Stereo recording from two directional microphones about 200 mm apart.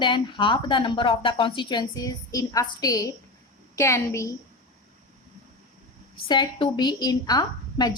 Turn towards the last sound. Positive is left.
turn(degrees=20)  # may be behind; listen again after turning